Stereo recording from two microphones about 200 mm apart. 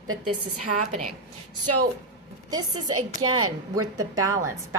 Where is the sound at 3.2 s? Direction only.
90° right.